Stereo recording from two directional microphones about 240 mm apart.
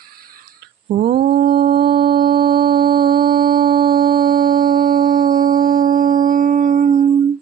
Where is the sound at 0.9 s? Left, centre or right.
Right.